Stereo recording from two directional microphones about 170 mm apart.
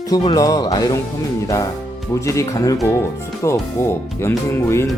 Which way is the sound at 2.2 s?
20° left (ahead or behind).